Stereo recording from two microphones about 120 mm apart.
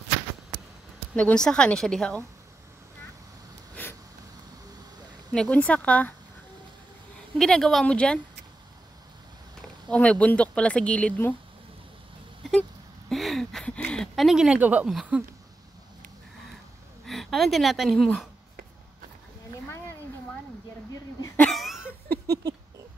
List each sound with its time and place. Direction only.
1.1 s a woman's voice: 10° left (ahead or behind)
5.3 s a woman's voice: 10° left (ahead or behind)
7.3 s speech: 5° left (ahead or behind)
9.6 s speech: 10° left (ahead or behind)
13.1 s speech: centre (ahead or behind)
17.0 s speech: centre (ahead or behind)
21.4 s a sound: centre (ahead or behind)
22.2 s a sound: 30° right (ahead or behind)